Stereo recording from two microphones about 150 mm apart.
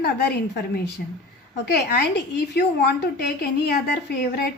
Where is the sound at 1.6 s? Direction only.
90° left.